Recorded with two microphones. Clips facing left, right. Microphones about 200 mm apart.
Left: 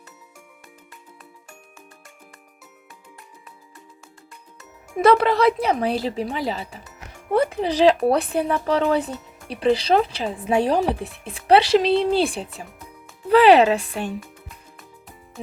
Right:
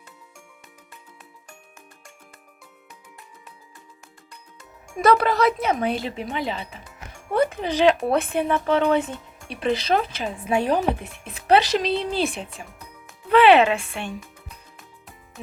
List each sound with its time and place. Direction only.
4.9 s speech: 25° left (ahead or behind)